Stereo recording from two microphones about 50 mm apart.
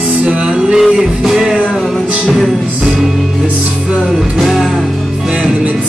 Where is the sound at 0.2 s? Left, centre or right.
Right.